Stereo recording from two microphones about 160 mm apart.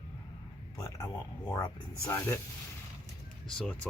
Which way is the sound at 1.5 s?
25° left (ahead or behind).